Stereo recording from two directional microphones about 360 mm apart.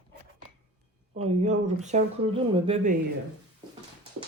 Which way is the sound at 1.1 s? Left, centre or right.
Centre.